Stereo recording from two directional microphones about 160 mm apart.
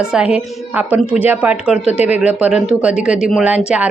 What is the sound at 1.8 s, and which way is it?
Speech, 40° left (ahead or behind).